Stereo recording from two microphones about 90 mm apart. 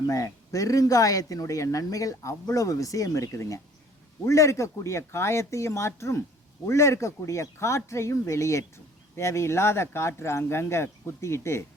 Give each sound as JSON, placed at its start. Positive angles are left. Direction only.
{"t": 0.1, "sound": "speech", "side_deg": 40}